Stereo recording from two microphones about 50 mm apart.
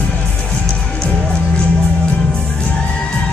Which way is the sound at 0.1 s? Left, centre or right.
Left.